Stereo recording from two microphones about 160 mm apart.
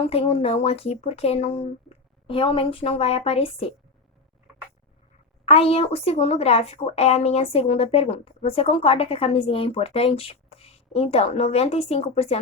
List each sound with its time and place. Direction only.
0.0 s speech: 40° left (ahead or behind)
5.5 s speech: 40° left (ahead or behind)